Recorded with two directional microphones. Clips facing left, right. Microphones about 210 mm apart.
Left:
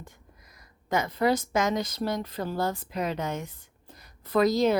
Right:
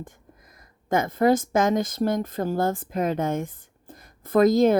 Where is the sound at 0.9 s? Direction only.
50° right (ahead or behind).